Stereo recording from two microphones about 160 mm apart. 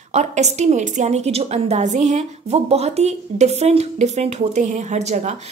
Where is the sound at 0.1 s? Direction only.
45° right (ahead or behind).